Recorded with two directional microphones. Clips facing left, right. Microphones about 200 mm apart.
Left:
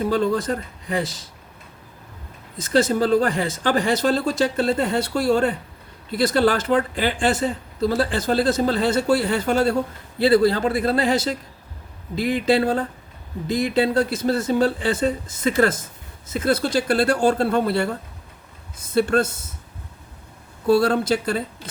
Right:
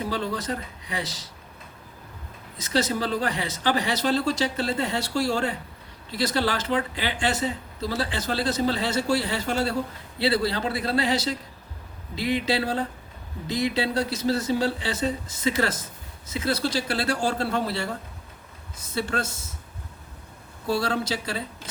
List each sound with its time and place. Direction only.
0.1 s speech: 50° left (ahead or behind)
2.6 s speech: 50° left (ahead or behind)
18.9 s speech: 55° left (ahead or behind)
20.7 s speech: 55° left (ahead or behind)